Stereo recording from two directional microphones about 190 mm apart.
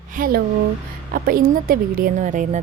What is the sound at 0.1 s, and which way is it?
A woman's voice, 50° right (ahead or behind).